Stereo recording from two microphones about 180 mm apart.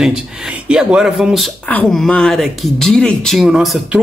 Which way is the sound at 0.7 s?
5° right (ahead or behind).